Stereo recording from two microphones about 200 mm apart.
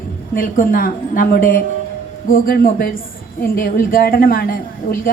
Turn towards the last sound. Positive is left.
turn(degrees=45)  # may be behind; listen again after turning